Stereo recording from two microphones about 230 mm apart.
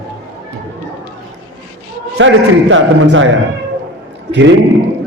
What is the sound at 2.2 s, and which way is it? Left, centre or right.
A man's voice, right.